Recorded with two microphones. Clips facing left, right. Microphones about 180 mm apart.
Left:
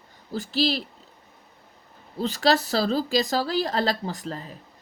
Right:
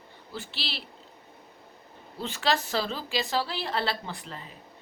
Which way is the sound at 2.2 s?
40° left (ahead or behind).